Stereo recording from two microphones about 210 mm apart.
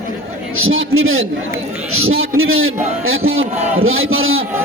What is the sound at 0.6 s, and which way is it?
A man's voice, 75° right (ahead or behind).